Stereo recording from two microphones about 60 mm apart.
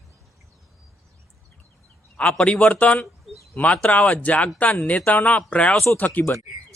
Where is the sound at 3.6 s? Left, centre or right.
Left.